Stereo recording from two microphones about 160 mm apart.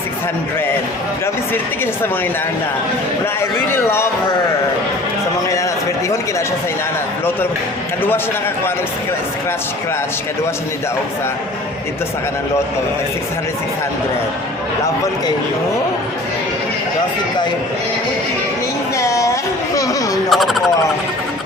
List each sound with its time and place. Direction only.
3.7 s speech: 15° left (ahead or behind)
18.9 s a sound: 20° left (ahead or behind)
20.3 s speech: centre (ahead or behind)